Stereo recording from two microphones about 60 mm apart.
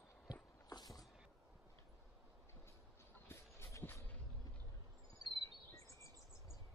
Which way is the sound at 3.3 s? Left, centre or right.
Left.